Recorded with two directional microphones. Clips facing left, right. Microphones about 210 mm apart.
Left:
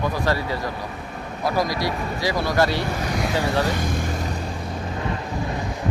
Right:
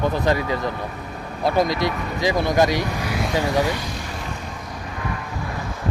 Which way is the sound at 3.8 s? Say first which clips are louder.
Left 5 dB; 50° left (ahead or behind).